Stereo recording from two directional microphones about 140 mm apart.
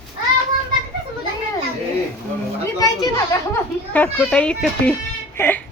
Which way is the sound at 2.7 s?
25° left (ahead or behind).